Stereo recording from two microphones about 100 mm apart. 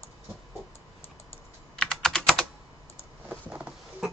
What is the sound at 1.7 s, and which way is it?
Computer keyboard, 5° left (ahead or behind).